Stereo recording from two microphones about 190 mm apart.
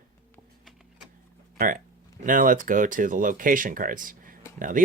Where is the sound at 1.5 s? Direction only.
45° right (ahead or behind).